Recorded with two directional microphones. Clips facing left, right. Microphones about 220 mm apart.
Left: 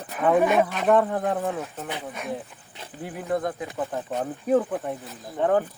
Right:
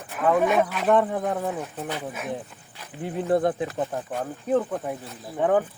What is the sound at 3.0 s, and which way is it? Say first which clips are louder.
Speech: right 5 dB; 25° right (ahead or behind).